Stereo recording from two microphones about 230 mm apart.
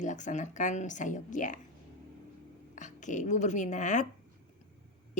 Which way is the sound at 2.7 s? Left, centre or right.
Left.